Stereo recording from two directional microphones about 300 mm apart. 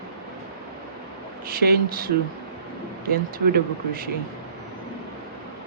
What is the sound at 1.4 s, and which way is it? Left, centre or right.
Speech, right.